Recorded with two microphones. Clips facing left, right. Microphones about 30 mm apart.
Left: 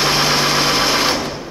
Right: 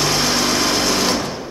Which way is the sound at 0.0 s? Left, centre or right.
Left.